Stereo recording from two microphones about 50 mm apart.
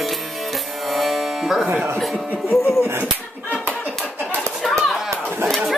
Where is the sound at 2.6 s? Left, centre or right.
Left.